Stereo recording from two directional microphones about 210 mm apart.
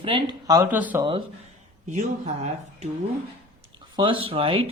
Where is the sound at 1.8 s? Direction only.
35° right (ahead or behind).